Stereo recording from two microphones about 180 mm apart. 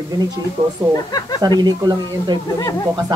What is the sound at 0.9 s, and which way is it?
Speech, 20° left (ahead or behind).